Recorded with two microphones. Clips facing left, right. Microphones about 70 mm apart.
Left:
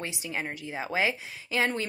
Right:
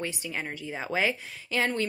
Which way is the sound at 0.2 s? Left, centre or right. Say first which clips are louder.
Left 1 dB; centre.